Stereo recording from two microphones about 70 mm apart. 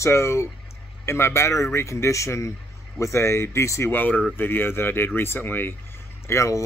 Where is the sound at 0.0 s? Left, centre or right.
Left.